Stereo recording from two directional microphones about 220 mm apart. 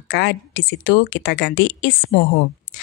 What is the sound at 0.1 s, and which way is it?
Speech, 50° left (ahead or behind).